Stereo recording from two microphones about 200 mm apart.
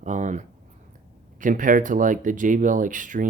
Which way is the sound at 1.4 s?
40° right (ahead or behind).